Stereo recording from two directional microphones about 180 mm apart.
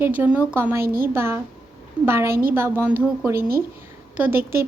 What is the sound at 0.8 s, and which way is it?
Speech, 55° right (ahead or behind).